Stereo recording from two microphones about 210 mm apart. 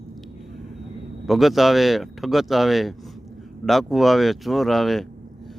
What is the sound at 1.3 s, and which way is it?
A man's voice, centre (ahead or behind).